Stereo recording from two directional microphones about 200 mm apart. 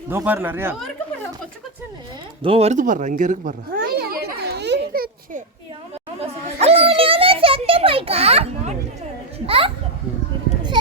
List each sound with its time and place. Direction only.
0.1 s speech: 10° right (ahead or behind)
2.4 s a sound: 30° right (ahead or behind); by 5.0 s 55° right (ahead or behind)
6.1 s children playing: 30° right (ahead or behind)